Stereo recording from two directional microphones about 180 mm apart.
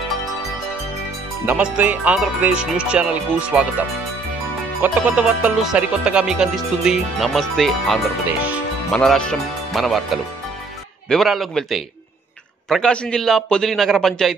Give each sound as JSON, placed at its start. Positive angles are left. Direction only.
{"t": 1.4, "sound": "speech", "side_deg": -10}
{"t": 4.8, "sound": "speech", "side_deg": -10}
{"t": 11.1, "sound": "speech", "side_deg": 0}